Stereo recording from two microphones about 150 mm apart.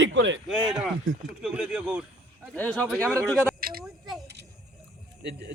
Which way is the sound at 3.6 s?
80° right.